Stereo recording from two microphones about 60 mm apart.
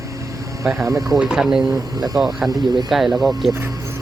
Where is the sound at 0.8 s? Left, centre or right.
Right.